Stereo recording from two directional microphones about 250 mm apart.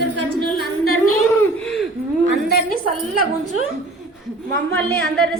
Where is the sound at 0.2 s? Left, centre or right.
Left.